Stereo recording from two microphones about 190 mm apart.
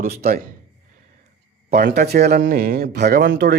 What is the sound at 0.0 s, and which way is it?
Speech, 50° right (ahead or behind).